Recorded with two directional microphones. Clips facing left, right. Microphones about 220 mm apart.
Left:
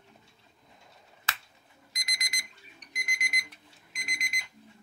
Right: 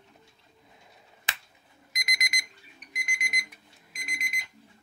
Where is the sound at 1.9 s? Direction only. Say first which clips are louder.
Right 6 dB; 20° right (ahead or behind).